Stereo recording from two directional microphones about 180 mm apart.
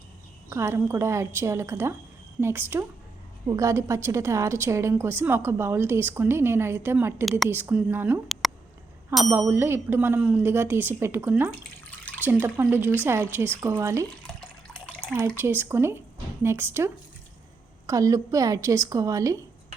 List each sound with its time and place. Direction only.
0.5 s a woman's voice: 15° right (ahead or behind)
7.3 s a woman's voice: centre (ahead or behind)
7.5 s a woman's voice: 10° right (ahead or behind)
8.3 s a sound: centre (ahead or behind)
9.3 s a woman's voice: 15° right (ahead or behind)
11.9 s water: 10° left (ahead or behind)
12.2 s a woman's voice: 10° right (ahead or behind)
15.4 s a woman's voice: 15° right (ahead or behind)